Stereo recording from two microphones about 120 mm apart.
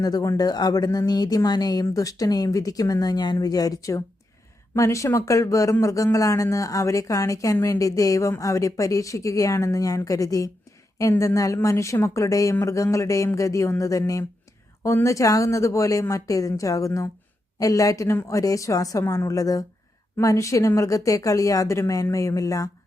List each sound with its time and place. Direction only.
0.0 s speech: 30° left (ahead or behind)